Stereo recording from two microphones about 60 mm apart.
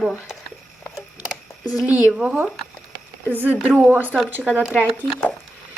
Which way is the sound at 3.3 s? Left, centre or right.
Right.